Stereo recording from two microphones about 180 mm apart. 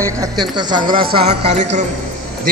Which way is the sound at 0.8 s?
55° right (ahead or behind).